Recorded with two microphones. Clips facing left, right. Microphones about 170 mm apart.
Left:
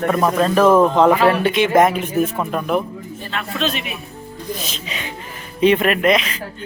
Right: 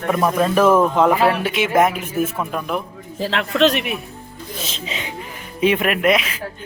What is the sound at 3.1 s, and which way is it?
Speech, 90° right.